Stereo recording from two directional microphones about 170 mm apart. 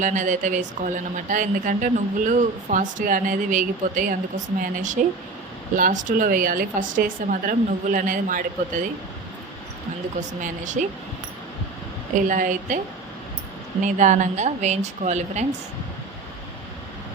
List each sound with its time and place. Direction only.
0.0 s speech: 45° right (ahead or behind)
10.2 s speech: 45° right (ahead or behind)
12.1 s speech: 50° right (ahead or behind)
13.8 s speech: 45° right (ahead or behind)